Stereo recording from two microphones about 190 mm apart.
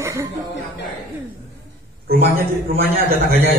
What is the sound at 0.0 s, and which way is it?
Chuckle, 15° right (ahead or behind).